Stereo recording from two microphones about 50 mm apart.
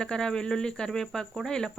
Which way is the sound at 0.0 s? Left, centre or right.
Centre.